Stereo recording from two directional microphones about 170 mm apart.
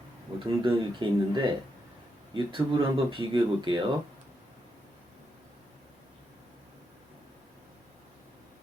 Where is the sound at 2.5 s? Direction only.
30° right (ahead or behind).